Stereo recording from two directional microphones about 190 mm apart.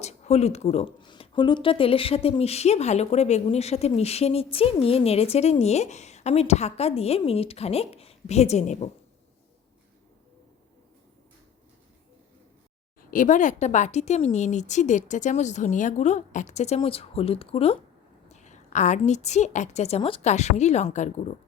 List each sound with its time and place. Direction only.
0.0 s speech: 35° left (ahead or behind)
13.1 s speech: 45° left (ahead or behind)